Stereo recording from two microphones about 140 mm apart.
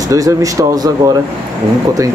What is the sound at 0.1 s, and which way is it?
Speech, 25° right (ahead or behind).